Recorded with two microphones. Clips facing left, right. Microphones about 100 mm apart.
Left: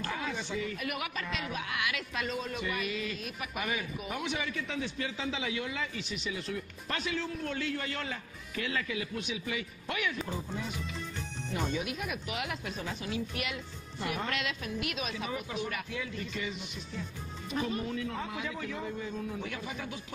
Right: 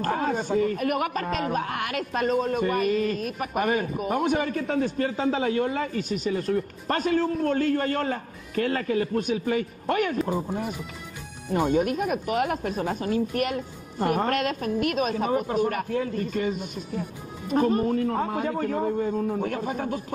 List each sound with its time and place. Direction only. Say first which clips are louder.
0.0 s speech: right 10 dB; 45° right (ahead or behind)